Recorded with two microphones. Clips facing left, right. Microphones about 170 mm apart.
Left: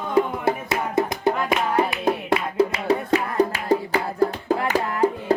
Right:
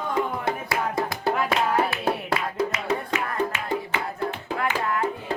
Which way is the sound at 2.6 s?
35° left (ahead or behind).